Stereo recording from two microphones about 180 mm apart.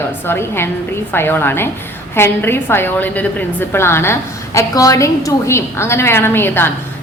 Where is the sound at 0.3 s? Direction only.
10° left (ahead or behind).